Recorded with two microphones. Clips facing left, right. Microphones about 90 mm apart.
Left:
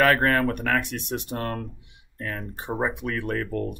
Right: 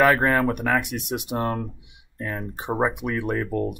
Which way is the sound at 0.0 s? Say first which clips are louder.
Right 2 dB; 10° right (ahead or behind).